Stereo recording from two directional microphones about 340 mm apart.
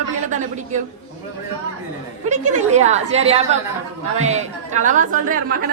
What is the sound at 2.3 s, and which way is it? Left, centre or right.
A woman's voice, right.